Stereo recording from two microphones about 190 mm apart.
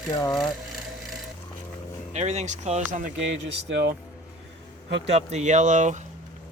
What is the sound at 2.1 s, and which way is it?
Speech, 35° right (ahead or behind).